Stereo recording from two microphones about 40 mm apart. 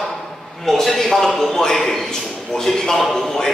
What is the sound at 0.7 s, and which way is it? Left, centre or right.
A man's voice, centre.